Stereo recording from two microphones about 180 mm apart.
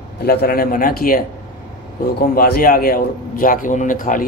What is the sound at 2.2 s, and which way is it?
A man's voice, 55° left (ahead or behind).